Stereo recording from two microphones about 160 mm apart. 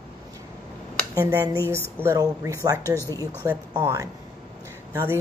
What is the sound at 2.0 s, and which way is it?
A woman's voice, 20° right (ahead or behind).